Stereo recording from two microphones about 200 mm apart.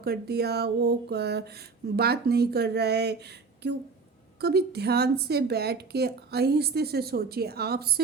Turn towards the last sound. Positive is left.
turn(degrees=-50)  # may be behind; listen again after turning